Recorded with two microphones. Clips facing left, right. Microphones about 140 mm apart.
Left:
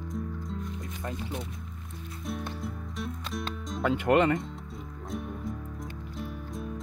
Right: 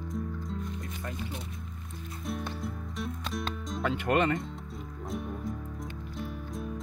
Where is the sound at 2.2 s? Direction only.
Centre (ahead or behind).